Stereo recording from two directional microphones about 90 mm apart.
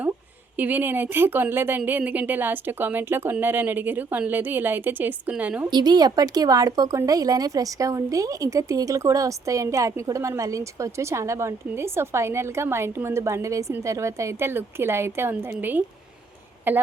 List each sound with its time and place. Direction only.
0.5 s a woman's voice: 20° right (ahead or behind)
5.7 s a woman's voice: 50° right (ahead or behind); by 16.8 s 20° right (ahead or behind)